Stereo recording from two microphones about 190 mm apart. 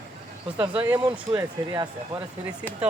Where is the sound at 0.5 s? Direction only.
25° right (ahead or behind).